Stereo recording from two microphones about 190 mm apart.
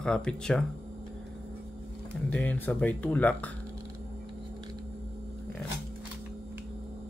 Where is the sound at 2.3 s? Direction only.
5° left (ahead or behind).